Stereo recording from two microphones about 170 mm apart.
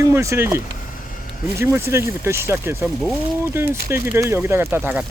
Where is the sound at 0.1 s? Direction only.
15° right (ahead or behind).